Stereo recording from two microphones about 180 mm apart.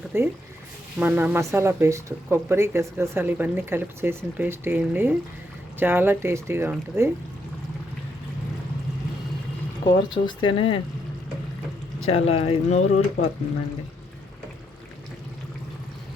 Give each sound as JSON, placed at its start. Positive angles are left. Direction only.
{"t": 0.1, "sound": "speech", "side_deg": -15}
{"t": 9.8, "sound": "speech", "side_deg": 25}
{"t": 12.0, "sound": "speech", "side_deg": 35}